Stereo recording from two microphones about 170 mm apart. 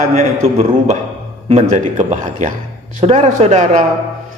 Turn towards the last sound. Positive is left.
turn(degrees=-45)  # may be behind; listen again after turning